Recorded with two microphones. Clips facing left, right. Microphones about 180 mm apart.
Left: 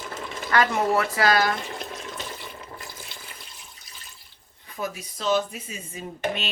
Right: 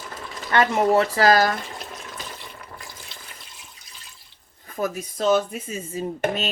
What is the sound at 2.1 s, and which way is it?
Water, 25° left (ahead or behind).